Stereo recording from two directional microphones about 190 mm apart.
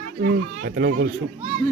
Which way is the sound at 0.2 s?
60° right (ahead or behind).